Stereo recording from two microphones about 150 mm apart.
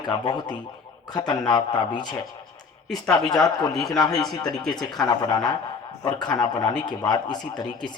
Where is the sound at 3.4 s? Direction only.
25° left (ahead or behind).